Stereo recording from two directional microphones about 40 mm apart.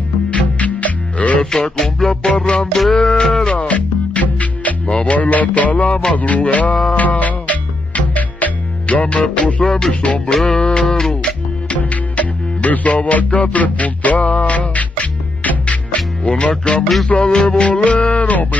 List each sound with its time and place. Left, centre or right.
0.3 s music: left
2.0 s music: left
3.5 s music: left
9.7 s music: centre
10.0 s music: left
10.3 s music: centre
11.7 s music: left
16.3 s music: left